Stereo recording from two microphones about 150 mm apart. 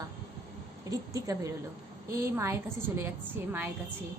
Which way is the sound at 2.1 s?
20° right (ahead or behind).